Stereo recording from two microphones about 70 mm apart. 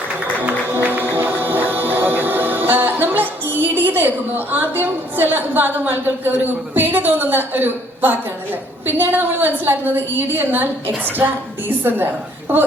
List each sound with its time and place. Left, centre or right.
0.4 s music: right
8.9 s a woman's voice: right